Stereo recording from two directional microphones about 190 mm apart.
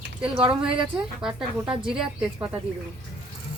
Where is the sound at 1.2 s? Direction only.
5° right (ahead or behind).